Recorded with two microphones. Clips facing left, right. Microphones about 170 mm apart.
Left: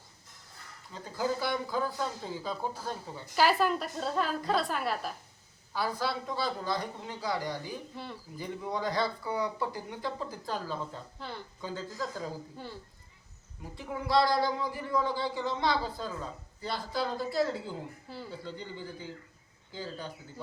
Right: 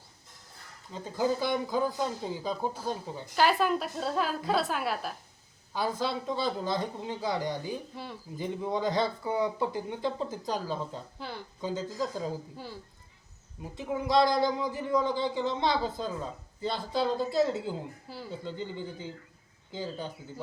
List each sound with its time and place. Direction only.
0.9 s a man's voice: 20° right (ahead or behind)
3.3 s a woman's voice: centre (ahead or behind)
5.7 s a man's voice: 20° right (ahead or behind)
13.6 s a man's voice: 20° right (ahead or behind)